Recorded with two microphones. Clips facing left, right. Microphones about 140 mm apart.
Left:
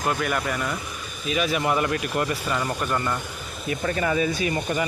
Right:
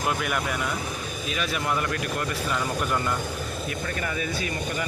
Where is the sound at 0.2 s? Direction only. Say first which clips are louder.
Left 2 dB; 5° right (ahead or behind).